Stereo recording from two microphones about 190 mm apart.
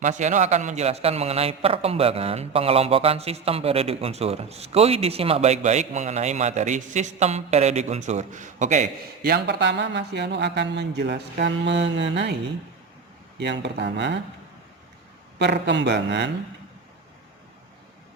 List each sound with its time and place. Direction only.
0.0 s a man's voice: 40° right (ahead or behind); by 12.3 s 70° right (ahead or behind)
13.4 s speech: 65° right (ahead or behind)
15.4 s speech: 65° right (ahead or behind)